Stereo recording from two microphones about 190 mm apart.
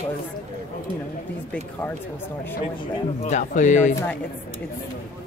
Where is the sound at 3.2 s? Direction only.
40° left (ahead or behind).